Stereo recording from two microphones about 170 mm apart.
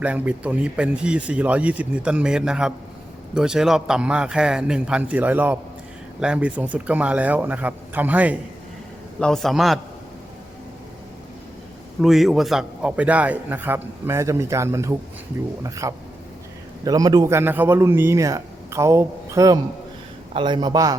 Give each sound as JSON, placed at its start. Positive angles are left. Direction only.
{"t": 0.0, "sound": "a man's voice", "side_deg": -10}
{"t": 9.2, "sound": "speech", "side_deg": 0}
{"t": 12.0, "sound": "a man's voice", "side_deg": 0}